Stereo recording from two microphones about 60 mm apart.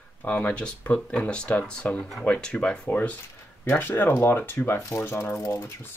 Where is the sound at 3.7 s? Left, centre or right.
Left.